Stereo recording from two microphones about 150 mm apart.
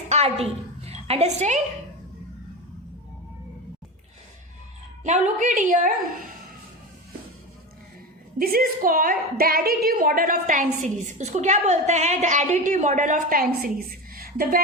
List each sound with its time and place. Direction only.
0.1 s a sound: 45° right (ahead or behind)
5.0 s a woman's voice: 50° right (ahead or behind)
8.4 s a woman's voice: 80° right